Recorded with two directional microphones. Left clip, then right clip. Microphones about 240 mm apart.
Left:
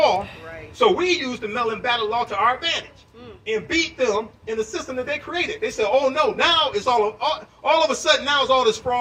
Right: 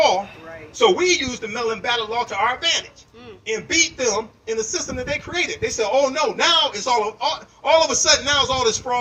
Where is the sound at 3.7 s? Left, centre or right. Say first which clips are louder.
Right 2 dB; right.